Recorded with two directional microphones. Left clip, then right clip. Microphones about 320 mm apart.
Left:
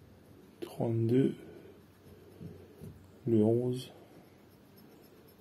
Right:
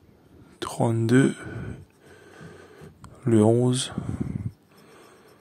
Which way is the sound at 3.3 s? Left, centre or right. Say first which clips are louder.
Right 8 dB; right.